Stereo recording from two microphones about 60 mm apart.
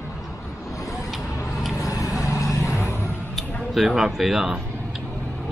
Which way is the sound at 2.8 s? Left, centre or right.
Left.